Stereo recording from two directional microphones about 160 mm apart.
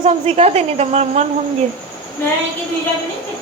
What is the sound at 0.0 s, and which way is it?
A woman's voice, 40° right (ahead or behind).